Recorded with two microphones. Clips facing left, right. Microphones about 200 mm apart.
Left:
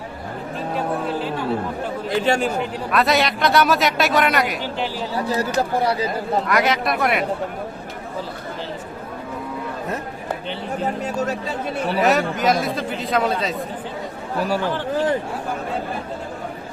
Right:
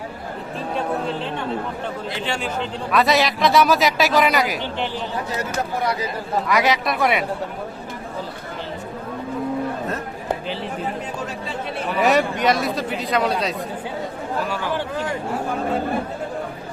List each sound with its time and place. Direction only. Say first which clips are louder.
2.0 s speech: left 10 dB; 45° left (ahead or behind)
2.9 s a man's voice: right 1 dB; centre (ahead or behind)
5.1 s speech: left 4 dB; 35° left (ahead or behind)
6.5 s a man's voice: right 2 dB; centre (ahead or behind)
11.0 s speech: left 5 dB; 40° left (ahead or behind)
12.0 s a man's voice: right 1 dB; centre (ahead or behind)
14.5 s speech: left 3 dB; 35° left (ahead or behind)